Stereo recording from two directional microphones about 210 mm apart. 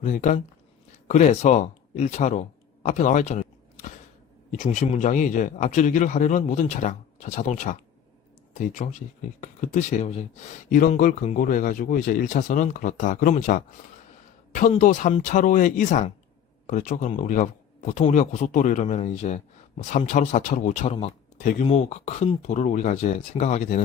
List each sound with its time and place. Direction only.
0.0 s speech: 35° left (ahead or behind)
4.5 s speech: 35° left (ahead or behind)